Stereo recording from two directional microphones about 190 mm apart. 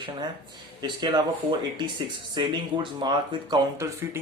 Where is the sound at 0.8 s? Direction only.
20° right (ahead or behind).